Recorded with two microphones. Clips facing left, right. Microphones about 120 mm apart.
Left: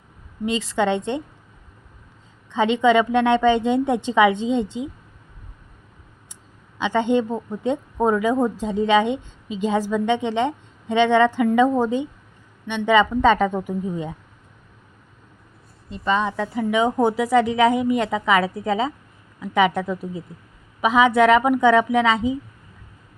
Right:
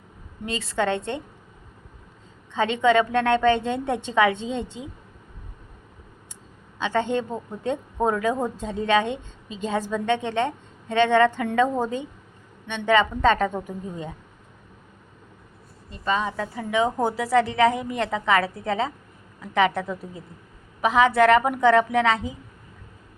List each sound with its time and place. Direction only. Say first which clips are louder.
0.4 s a woman's voice: left 4 dB; 15° left (ahead or behind)
2.6 s a woman's voice: left 3 dB; 15° left (ahead or behind)
6.7 s a woman's voice: left 4 dB; 15° left (ahead or behind)
15.9 s a woman's voice: left 3 dB; 20° left (ahead or behind); by 22.0 s 5° left (ahead or behind)